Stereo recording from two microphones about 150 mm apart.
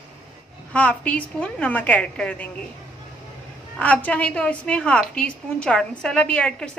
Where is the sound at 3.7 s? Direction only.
10° left (ahead or behind).